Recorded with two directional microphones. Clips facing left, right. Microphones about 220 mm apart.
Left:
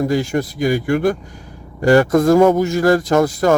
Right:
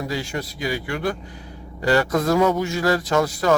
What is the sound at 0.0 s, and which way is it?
Speech, 50° left (ahead or behind).